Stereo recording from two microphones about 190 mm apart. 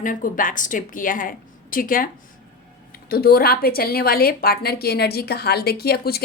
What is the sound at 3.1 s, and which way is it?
A woman's voice, 50° left (ahead or behind).